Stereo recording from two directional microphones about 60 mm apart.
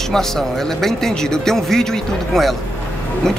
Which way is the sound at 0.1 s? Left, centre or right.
Centre.